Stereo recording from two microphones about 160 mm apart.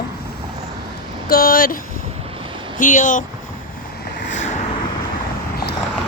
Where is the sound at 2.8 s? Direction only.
55° left (ahead or behind).